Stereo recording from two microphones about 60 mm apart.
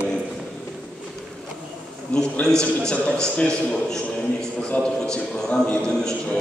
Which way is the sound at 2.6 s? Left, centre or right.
Centre.